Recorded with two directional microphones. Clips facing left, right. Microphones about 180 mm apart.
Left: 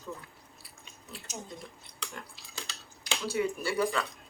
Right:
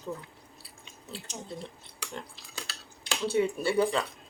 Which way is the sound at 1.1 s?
25° right (ahead or behind).